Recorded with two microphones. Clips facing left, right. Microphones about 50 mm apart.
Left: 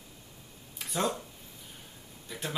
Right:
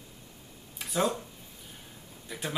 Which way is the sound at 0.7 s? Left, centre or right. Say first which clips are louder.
Right 2 dB; centre.